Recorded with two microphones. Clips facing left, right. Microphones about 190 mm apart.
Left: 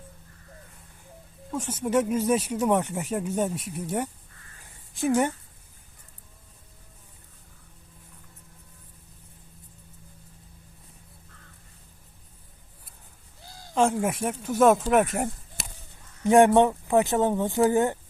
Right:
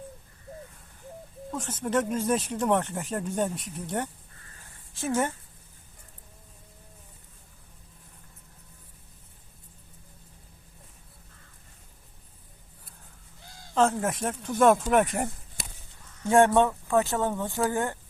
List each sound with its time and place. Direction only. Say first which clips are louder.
1.5 s speech: left 3 dB; 10° left (ahead or behind)
13.7 s speech: left 1 dB; 10° left (ahead or behind)
16.2 s speech: left 3 dB; 15° left (ahead or behind)